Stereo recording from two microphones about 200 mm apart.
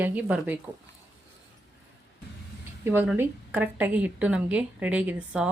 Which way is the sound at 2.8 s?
10° right (ahead or behind).